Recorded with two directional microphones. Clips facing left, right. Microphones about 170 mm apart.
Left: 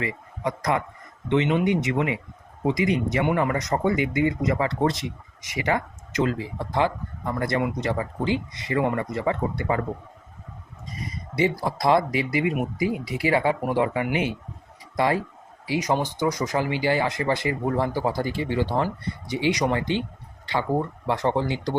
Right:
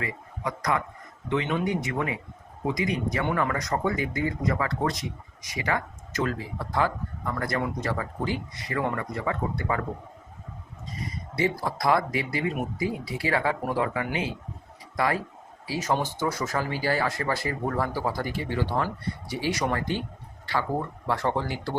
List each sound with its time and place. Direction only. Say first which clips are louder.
0.0 s a man's voice: left 4 dB; 25° left (ahead or behind)
11.3 s speech: left 3 dB; 20° left (ahead or behind)